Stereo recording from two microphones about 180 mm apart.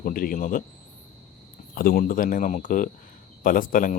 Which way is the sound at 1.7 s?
50° left (ahead or behind).